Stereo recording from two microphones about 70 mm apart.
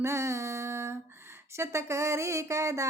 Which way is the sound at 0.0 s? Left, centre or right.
Right.